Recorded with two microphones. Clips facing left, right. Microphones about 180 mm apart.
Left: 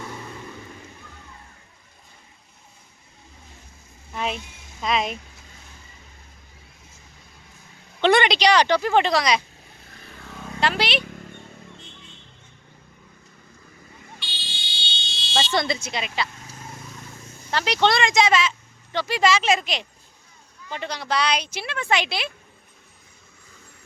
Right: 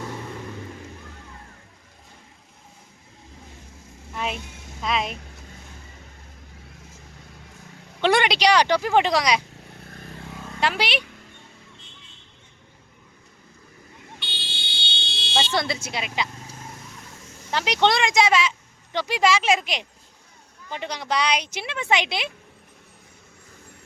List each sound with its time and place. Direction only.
4.1 s vehicle: 5° right (ahead or behind)
4.8 s speech: centre (ahead or behind)
8.0 s speech: 10° right (ahead or behind)
9.8 s vehicle: 50° right (ahead or behind)
10.6 s speech: 10° right (ahead or behind)
14.2 s fire alarm: 60° right (ahead or behind)
15.4 s speech: 5° right (ahead or behind)
17.5 s speech: 15° right (ahead or behind)